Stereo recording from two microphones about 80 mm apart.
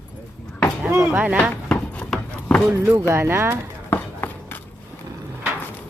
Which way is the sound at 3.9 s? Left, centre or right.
Left.